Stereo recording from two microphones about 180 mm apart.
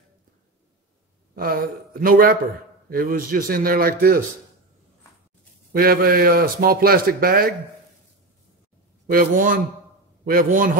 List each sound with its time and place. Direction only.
1.3 s a man's voice: 55° right (ahead or behind)
5.7 s a man's voice: 55° right (ahead or behind)
9.0 s a man's voice: 55° right (ahead or behind)